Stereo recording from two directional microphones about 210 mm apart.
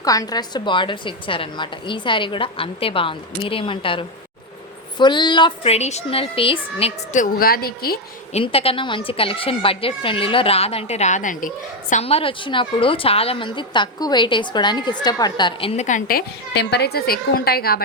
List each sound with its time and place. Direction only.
0.0 s speech: 15° left (ahead or behind); by 7.9 s 45° left (ahead or behind)
8.3 s speech: 30° left (ahead or behind); by 17.8 s 45° left (ahead or behind)